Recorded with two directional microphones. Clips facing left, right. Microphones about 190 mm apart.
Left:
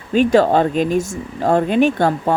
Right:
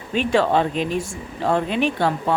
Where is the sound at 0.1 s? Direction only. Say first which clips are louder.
Left 6 dB; 40° left (ahead or behind).